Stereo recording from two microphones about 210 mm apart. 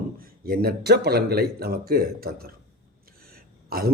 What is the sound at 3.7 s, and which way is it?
Speech, 45° right (ahead or behind).